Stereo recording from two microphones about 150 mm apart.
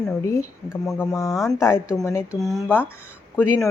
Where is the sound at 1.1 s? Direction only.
20° left (ahead or behind).